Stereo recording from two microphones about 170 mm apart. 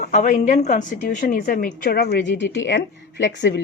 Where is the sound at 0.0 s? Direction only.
50° left (ahead or behind).